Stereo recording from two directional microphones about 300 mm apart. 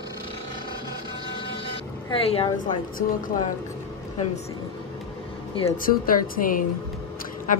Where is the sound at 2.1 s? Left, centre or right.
Centre.